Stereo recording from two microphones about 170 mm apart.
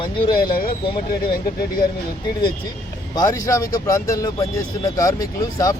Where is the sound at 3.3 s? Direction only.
20° left (ahead or behind).